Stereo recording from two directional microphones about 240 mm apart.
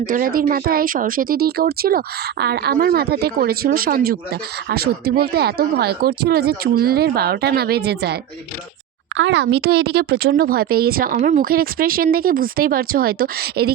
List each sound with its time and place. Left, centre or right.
0.0 s speech: right